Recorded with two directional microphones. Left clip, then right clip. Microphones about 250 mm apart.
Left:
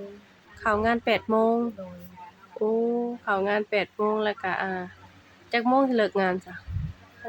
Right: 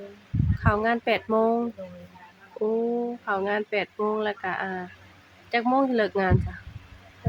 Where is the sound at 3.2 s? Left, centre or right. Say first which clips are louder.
Left 2 dB; centre.